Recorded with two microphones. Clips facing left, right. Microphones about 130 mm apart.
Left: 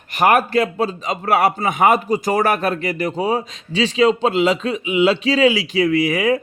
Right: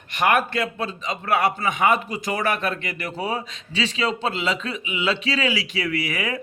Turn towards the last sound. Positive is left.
turn(degrees=35)  # may be behind; listen again after turning